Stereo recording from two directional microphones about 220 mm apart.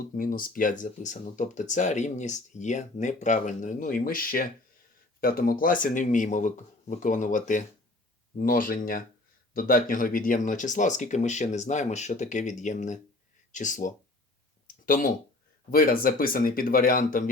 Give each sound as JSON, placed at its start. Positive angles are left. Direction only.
{"t": 0.1, "sound": "speech", "side_deg": 40}